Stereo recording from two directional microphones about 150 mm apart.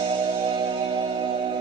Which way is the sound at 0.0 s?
40° right (ahead or behind).